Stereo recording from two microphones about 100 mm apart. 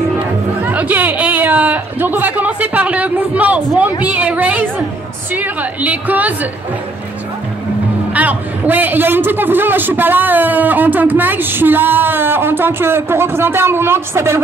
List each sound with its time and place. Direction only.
0.6 s chatter: 15° right (ahead or behind)
4.0 s a sound: 15° right (ahead or behind)
5.3 s a woman's voice: 15° right (ahead or behind)
8.1 s a man's voice: 15° right (ahead or behind)